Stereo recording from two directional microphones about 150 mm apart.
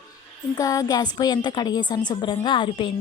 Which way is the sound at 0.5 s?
25° left (ahead or behind).